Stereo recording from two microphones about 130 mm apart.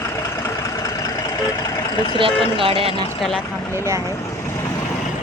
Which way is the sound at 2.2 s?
45° right (ahead or behind).